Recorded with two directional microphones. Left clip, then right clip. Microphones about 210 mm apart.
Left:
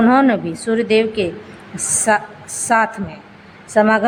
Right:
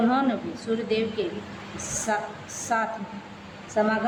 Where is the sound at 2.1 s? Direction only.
35° left (ahead or behind).